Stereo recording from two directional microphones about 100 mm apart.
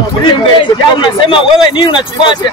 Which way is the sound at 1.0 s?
55° left (ahead or behind).